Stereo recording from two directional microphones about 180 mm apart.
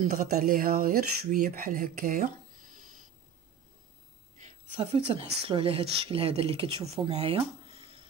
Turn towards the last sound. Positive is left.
turn(degrees=-30)  # may be behind; listen again after turning